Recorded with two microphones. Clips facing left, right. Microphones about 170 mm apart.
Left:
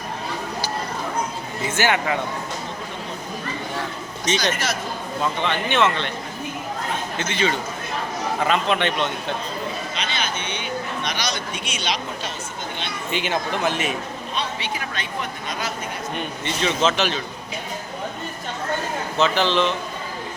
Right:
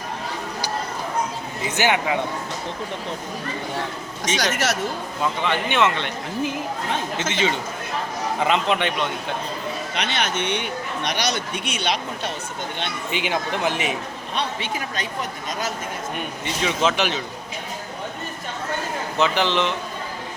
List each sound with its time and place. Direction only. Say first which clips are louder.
1.6 s speech: even; 15° right (ahead or behind)
4.4 s speech: right 3 dB; 75° right (ahead or behind)
5.2 s speech: right 1 dB; 10° right (ahead or behind)
7.2 s speech: left 3 dB; 20° right (ahead or behind)
9.9 s speech: right 3 dB; 70° right (ahead or behind)
11.2 s speech: right 3 dB; 60° right (ahead or behind)
13.1 s speech: left 1 dB; 15° right (ahead or behind)
16.1 s speech: left 1 dB; 10° right (ahead or behind)
19.2 s speech: left 1 dB; 15° right (ahead or behind)